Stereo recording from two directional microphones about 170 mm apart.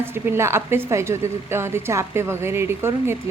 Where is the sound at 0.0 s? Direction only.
15° right (ahead or behind).